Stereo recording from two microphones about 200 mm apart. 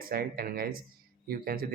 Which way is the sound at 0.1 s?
50° right (ahead or behind).